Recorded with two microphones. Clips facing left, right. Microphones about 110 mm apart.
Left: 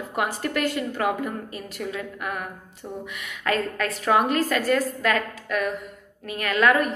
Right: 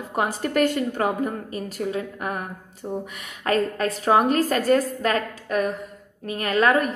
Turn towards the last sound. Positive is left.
turn(degrees=-35)  # may be behind; listen again after turning